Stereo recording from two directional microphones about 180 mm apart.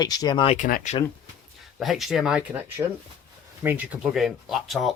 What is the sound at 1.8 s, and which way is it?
Speech, centre (ahead or behind).